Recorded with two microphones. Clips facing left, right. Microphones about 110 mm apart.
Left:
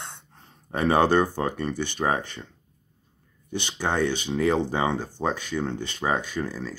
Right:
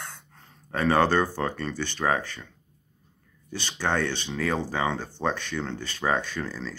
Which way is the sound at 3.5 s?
15° left (ahead or behind).